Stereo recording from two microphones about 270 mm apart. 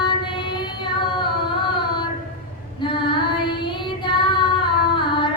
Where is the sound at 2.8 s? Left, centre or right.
Centre.